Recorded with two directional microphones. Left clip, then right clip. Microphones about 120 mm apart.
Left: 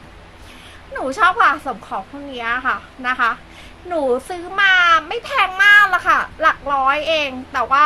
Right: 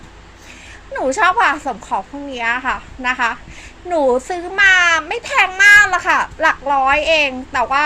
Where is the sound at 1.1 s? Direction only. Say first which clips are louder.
Even; 25° right (ahead or behind).